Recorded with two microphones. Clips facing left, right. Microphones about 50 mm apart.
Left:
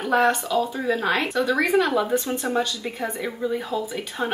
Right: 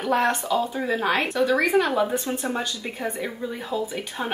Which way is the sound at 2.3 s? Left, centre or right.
Right.